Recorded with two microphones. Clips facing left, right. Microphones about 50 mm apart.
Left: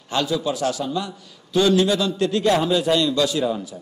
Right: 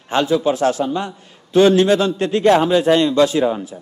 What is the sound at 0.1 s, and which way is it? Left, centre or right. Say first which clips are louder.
A man's voice: right 6 dB; right.